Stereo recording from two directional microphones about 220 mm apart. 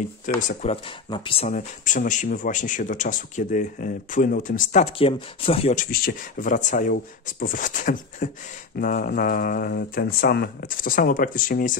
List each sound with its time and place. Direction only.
0.4 s speech: 35° left (ahead or behind)
5.9 s speech: 45° left (ahead or behind)